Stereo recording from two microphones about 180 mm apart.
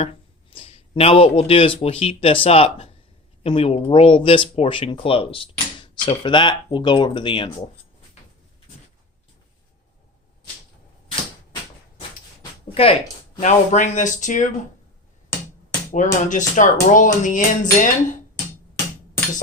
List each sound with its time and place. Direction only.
0.0 s speech: 30° left (ahead or behind)
12.4 s a sound: 30° left (ahead or behind)
13.4 s speech: 45° left (ahead or behind)
15.9 s speech: 45° left (ahead or behind)